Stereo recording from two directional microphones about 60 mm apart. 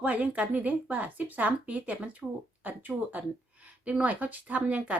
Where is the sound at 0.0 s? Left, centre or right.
Right.